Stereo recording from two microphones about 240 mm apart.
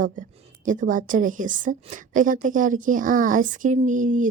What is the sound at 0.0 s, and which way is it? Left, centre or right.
A woman's voice, right.